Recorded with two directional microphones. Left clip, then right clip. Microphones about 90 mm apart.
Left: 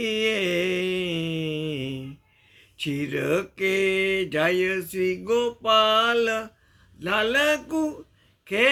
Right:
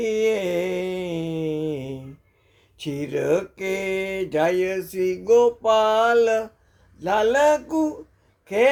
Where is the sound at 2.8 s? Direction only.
35° right (ahead or behind).